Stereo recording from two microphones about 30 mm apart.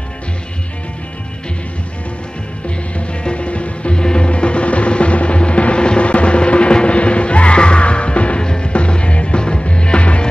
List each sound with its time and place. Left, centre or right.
3.1 s music: left
3.9 s music: left
4.3 s music: left
8.4 s music: left